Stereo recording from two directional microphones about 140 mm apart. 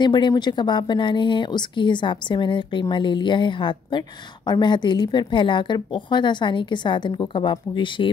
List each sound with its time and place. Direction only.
0.0 s speech: 35° left (ahead or behind)